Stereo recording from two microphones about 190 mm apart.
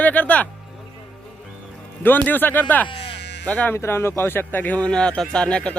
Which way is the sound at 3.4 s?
5° left (ahead or behind).